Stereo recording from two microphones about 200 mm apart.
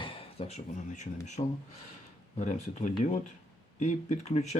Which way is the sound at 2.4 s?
35° left (ahead or behind).